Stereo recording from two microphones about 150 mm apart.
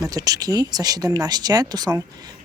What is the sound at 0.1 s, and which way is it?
Speech, 25° right (ahead or behind).